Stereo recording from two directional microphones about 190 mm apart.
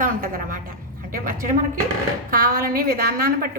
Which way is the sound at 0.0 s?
45° right (ahead or behind).